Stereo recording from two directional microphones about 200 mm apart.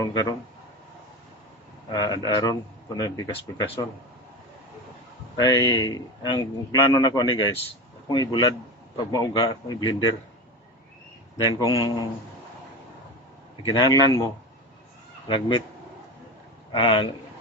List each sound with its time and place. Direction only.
0.0 s speech: 15° left (ahead or behind)
1.9 s a man's voice: 20° left (ahead or behind)
5.4 s a man's voice: 20° left (ahead or behind)
11.5 s a man's voice: 20° left (ahead or behind)
13.7 s a man's voice: 20° left (ahead or behind)
15.3 s a man's voice: 25° left (ahead or behind)
16.7 s a man's voice: 25° left (ahead or behind)